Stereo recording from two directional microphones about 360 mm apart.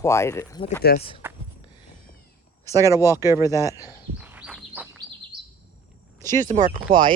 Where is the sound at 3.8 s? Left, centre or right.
Centre.